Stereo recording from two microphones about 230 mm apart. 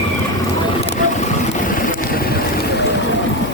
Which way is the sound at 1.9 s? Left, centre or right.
Left.